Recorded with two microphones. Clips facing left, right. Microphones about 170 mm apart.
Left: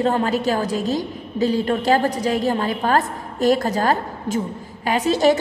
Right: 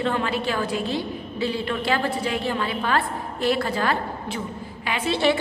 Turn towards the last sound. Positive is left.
turn(degrees=40)  # may be behind; listen again after turning